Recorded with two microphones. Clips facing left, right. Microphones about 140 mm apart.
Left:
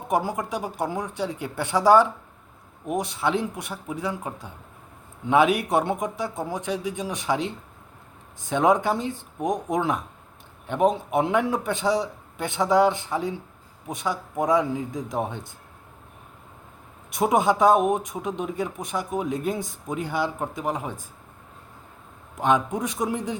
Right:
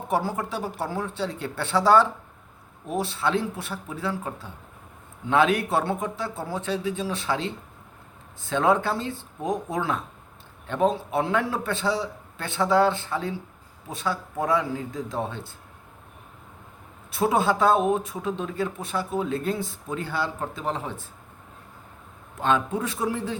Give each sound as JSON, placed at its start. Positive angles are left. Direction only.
{"t": 0.1, "sound": "speech", "side_deg": 15}
{"t": 17.1, "sound": "speech", "side_deg": 15}
{"t": 22.4, "sound": "speech", "side_deg": 15}